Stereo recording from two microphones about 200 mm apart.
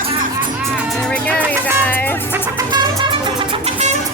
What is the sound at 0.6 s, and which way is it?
Speech, 5° right (ahead or behind).